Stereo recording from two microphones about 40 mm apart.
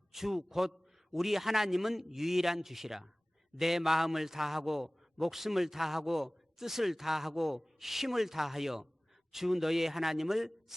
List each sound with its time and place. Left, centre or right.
0.1 s a man's voice: centre